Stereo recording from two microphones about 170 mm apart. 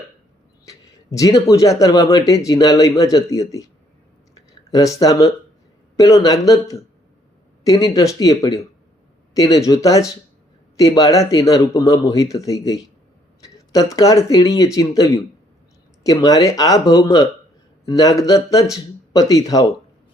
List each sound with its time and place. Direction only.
0.6 s speech: 20° left (ahead or behind)
4.4 s a sound: 20° left (ahead or behind)
6.0 s speech: 20° left (ahead or behind)